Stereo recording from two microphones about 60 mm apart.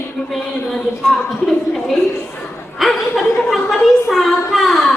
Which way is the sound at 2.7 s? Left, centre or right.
Centre.